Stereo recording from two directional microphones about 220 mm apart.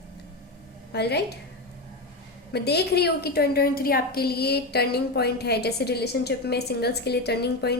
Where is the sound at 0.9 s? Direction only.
50° left (ahead or behind).